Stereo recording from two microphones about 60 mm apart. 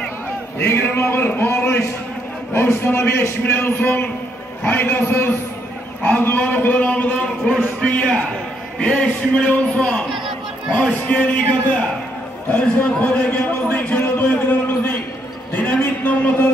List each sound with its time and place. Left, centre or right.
0.6 s a man's voice: left
2.8 s a man's voice: left
3.8 s a man's voice: left
12.4 s a man's voice: left